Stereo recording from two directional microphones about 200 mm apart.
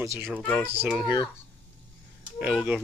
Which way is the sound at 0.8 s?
Centre (ahead or behind).